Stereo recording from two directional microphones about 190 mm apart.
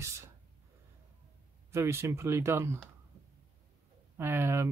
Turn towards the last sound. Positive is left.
turn(degrees=-15)  # may be behind; listen again after turning